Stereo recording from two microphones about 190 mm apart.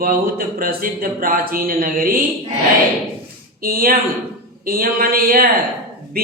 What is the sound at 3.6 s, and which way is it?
Speech, 50° right (ahead or behind).